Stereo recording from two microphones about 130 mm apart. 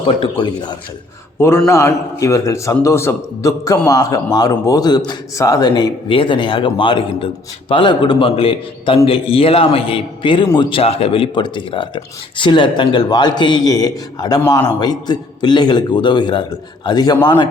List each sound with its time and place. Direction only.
0.2 s a man's voice: 35° left (ahead or behind)
1.4 s a man's voice: 20° left (ahead or behind); by 17.5 s 40° left (ahead or behind)